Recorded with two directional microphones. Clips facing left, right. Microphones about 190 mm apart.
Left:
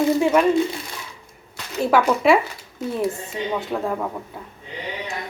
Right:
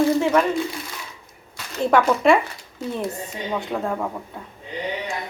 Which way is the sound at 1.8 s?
5° left (ahead or behind).